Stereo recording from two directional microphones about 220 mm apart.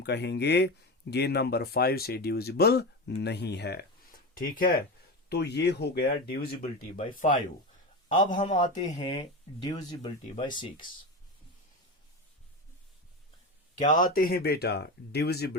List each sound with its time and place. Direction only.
0.0 s speech: 50° left (ahead or behind)
8.3 s a man's voice: 35° left (ahead or behind)
8.8 s speech: 20° left (ahead or behind)
13.7 s speech: 35° left (ahead or behind)